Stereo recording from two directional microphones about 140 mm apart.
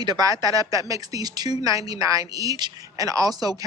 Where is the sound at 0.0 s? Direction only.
30° right (ahead or behind).